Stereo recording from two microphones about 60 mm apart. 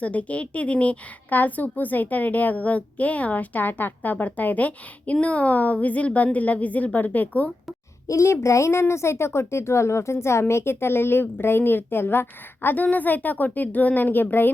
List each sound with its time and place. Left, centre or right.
0.0 s a woman's voice: left
8.0 s a child's voice: left